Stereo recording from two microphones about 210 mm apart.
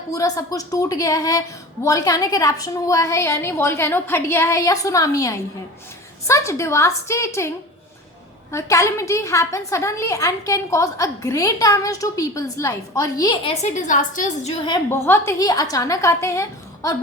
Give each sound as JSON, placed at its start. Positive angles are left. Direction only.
{"t": 0.1, "sound": "a woman's voice", "side_deg": 15}
{"t": 8.5, "sound": "a woman's voice", "side_deg": 15}
{"t": 13.6, "sound": "a woman's voice", "side_deg": 35}
{"t": 14.6, "sound": "a woman's voice", "side_deg": 15}